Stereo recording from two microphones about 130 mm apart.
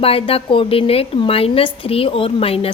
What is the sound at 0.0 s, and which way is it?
A woman's voice, 45° left (ahead or behind).